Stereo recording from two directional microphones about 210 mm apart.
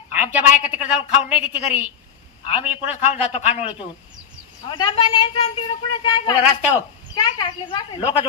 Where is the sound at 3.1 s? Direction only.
30° left (ahead or behind).